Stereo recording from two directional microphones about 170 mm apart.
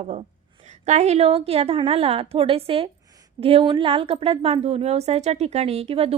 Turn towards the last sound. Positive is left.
turn(degrees=-35)  # may be behind; listen again after turning